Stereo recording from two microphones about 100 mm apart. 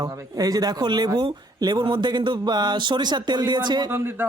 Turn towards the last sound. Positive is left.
turn(degrees=-20)  # may be behind; listen again after turning